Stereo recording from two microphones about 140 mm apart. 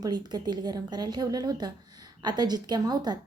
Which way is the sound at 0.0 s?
30° right (ahead or behind).